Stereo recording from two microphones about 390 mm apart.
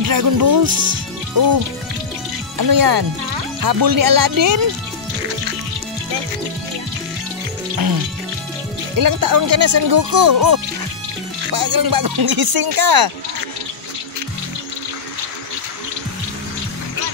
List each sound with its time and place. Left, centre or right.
0.0 s speech: right
2.5 s speech: right
8.9 s speech: right